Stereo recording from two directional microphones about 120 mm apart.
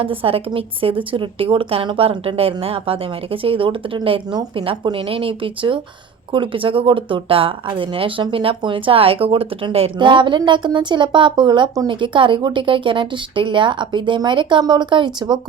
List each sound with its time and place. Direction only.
0.0 s speech: 50° right (ahead or behind)